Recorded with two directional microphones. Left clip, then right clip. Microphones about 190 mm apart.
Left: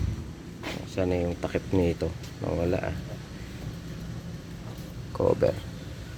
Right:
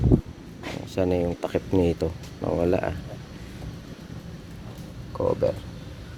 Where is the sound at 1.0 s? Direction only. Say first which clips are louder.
Right 4 dB; 30° right (ahead or behind).